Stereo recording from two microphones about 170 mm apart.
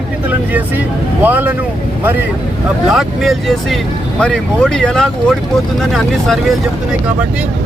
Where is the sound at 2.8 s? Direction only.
Centre (ahead or behind).